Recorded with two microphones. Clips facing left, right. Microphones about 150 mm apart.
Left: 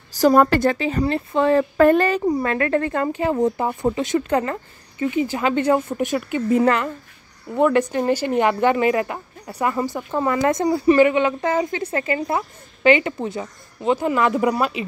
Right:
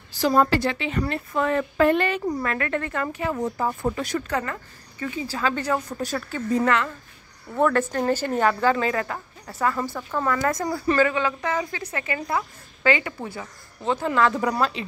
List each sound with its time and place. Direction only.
0.1 s speech: 45° left (ahead or behind)
1.8 s speech: 40° left (ahead or behind)
2.2 s a woman's voice: 25° left (ahead or behind)
3.6 s a woman's voice: 20° left (ahead or behind)
7.5 s speech: 15° left (ahead or behind)